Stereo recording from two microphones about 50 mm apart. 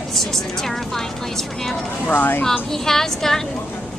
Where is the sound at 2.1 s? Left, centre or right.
Left.